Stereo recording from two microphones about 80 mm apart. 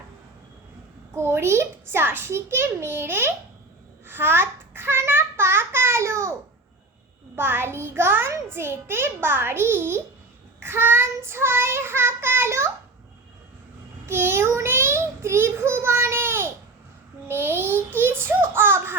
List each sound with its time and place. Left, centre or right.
1.1 s a child's voice: right
7.3 s a child's voice: right
14.1 s child singing: right
17.2 s a child's voice: right